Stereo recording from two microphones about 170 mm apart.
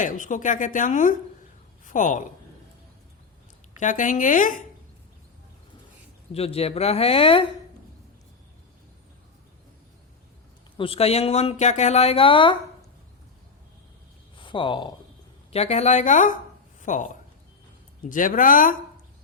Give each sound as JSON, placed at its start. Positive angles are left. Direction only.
{"t": 0.0, "sound": "a woman's voice", "side_deg": 50}
{"t": 3.8, "sound": "a woman's voice", "side_deg": 50}
{"t": 6.3, "sound": "speech", "side_deg": 35}
{"t": 10.8, "sound": "speech", "side_deg": 35}
{"t": 14.3, "sound": "speech", "side_deg": 30}
{"t": 15.5, "sound": "a woman's voice", "side_deg": 40}
{"t": 18.1, "sound": "a woman's voice", "side_deg": 50}